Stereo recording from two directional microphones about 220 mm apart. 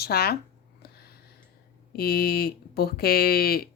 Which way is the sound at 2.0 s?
45° left (ahead or behind).